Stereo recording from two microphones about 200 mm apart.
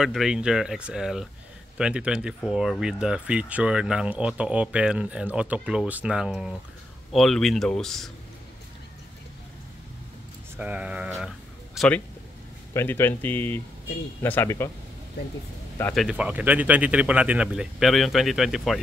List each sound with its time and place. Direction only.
0.0 s speech: centre (ahead or behind)
10.6 s speech: 5° right (ahead or behind)
12.7 s speech: 10° left (ahead or behind)
15.8 s speech: centre (ahead or behind)